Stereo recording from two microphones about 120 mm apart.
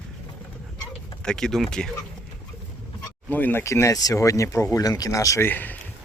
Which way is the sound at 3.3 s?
15° left (ahead or behind).